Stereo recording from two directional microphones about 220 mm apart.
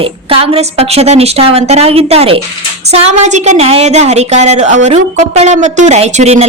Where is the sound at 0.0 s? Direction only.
25° right (ahead or behind).